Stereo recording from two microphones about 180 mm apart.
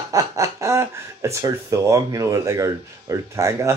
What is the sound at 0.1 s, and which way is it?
Speech, 20° right (ahead or behind).